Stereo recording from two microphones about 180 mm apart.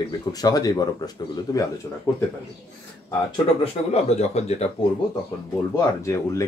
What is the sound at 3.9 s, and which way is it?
Speech, 35° left (ahead or behind).